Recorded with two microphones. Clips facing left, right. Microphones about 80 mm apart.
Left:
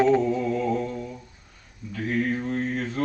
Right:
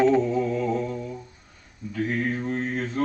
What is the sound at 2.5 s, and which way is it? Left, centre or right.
Mantra, right.